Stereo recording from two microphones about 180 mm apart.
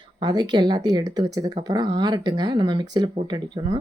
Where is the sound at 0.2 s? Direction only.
25° right (ahead or behind).